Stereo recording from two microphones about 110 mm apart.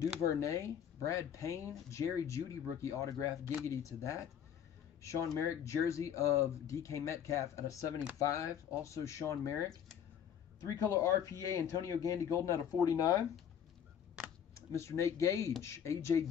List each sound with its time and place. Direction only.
0.2 s speech: 30° left (ahead or behind)
10.7 s speech: 30° left (ahead or behind)
14.5 s speech: 25° left (ahead or behind)